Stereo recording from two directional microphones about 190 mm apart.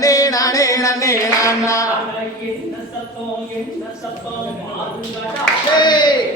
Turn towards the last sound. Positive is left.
turn(degrees=25)  # may be behind; listen again after turning